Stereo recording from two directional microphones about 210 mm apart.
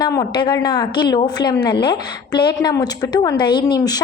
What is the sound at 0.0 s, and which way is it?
A woman's voice, 20° left (ahead or behind).